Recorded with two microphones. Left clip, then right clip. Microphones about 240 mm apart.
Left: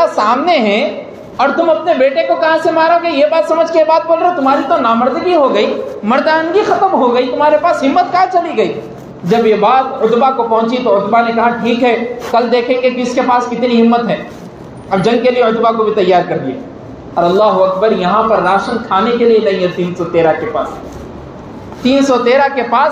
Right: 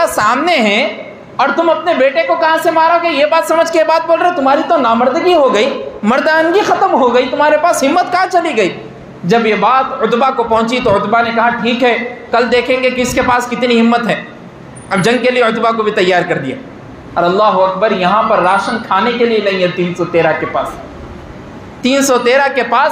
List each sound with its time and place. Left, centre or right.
0.0 s a woman's voice: right
21.8 s a woman's voice: right